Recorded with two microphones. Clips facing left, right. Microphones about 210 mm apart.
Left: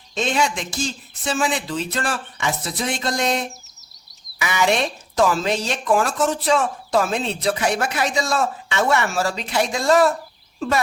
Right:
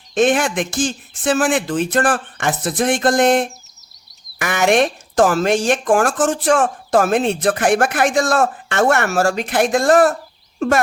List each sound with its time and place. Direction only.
0.1 s speech: 50° right (ahead or behind)